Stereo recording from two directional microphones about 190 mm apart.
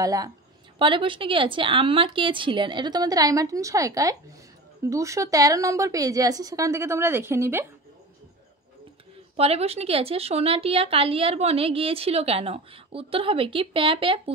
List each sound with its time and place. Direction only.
0.0 s a woman's voice: 20° right (ahead or behind)
9.4 s speech: 30° right (ahead or behind)